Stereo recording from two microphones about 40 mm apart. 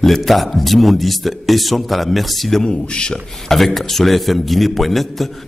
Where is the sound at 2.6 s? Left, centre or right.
Left.